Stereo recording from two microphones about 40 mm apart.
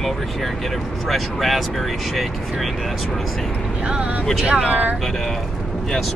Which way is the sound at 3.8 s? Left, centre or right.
Right.